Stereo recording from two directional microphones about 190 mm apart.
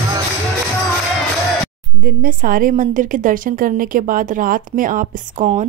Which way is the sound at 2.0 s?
50° right (ahead or behind).